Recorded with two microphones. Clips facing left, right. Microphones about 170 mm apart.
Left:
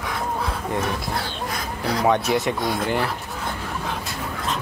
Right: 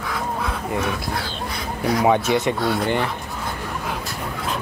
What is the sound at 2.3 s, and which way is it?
Speech, centre (ahead or behind).